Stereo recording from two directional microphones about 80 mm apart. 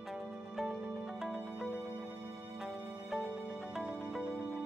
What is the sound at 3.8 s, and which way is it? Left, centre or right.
Music, centre.